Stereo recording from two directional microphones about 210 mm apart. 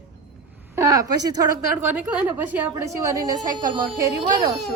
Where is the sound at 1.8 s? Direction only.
5° right (ahead or behind).